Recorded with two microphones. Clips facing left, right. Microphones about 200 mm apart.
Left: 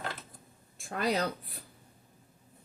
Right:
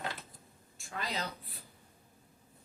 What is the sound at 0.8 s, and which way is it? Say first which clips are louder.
Speech: left 9 dB; 55° left (ahead or behind).